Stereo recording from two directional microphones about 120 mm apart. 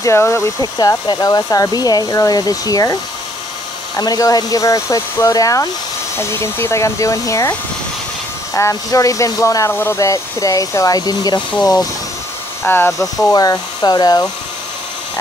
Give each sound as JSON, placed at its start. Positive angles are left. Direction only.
{"t": 0.0, "sound": "speech", "side_deg": 25}
{"t": 8.5, "sound": "speech", "side_deg": 25}
{"t": 12.6, "sound": "speech", "side_deg": 15}
{"t": 13.3, "sound": "speech", "side_deg": 30}